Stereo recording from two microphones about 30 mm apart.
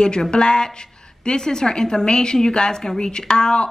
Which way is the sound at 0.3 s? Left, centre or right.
Left.